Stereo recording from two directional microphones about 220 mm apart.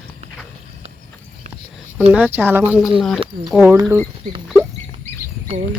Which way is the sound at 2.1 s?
10° right (ahead or behind).